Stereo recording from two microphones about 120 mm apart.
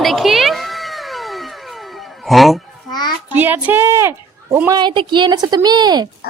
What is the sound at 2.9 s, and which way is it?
Child singing, 35° left (ahead or behind).